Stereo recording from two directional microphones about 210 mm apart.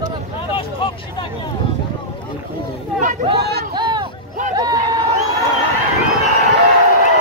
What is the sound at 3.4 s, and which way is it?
Speech, 50° right (ahead or behind).